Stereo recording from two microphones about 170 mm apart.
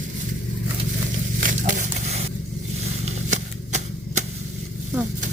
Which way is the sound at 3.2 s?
45° right (ahead or behind).